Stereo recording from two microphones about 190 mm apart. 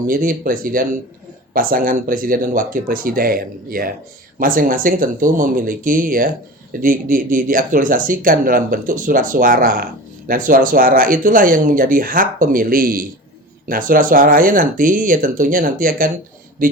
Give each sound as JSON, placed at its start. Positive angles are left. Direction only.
{"t": 0.1, "sound": "speech", "side_deg": -45}